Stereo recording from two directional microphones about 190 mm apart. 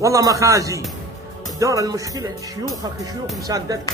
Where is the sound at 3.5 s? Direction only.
20° right (ahead or behind).